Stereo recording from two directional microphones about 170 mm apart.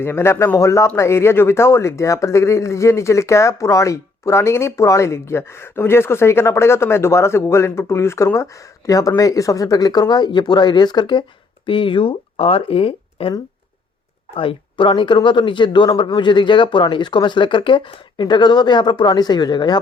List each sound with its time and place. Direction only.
0.0 s speech: 15° left (ahead or behind); by 13.3 s 35° left (ahead or behind)
14.3 s speech: 30° left (ahead or behind)